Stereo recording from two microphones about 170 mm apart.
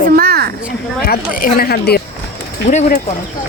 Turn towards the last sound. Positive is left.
turn(degrees=45)  # may be behind; listen again after turning